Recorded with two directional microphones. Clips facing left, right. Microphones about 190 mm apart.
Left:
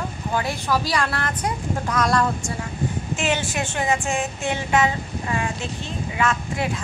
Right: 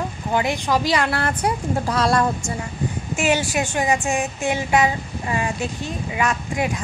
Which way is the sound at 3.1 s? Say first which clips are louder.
Right 5 dB; 10° right (ahead or behind).